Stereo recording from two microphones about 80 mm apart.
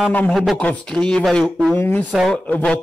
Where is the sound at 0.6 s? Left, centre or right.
Centre.